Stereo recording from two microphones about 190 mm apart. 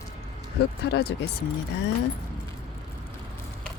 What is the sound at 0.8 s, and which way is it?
Speech, 60° left (ahead or behind).